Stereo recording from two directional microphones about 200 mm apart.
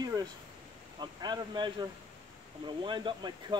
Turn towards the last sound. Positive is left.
turn(degrees=-25)  # may be behind; listen again after turning